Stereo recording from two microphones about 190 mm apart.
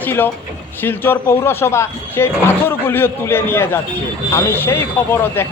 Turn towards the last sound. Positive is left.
turn(degrees=10)  # may be behind; listen again after turning